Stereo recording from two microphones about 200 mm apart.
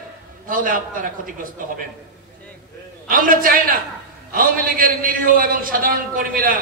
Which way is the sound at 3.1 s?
45° right (ahead or behind).